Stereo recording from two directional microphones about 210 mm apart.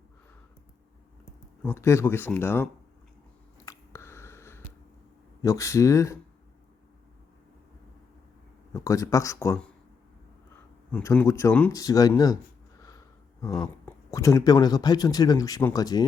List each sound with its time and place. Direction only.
1.6 s speech: 10° left (ahead or behind)
3.7 s a sound: 15° left (ahead or behind)
5.4 s speech: 15° left (ahead or behind)
8.7 s speech: 15° left (ahead or behind)
10.9 s speech: 10° left (ahead or behind)
13.6 s speech: 15° left (ahead or behind)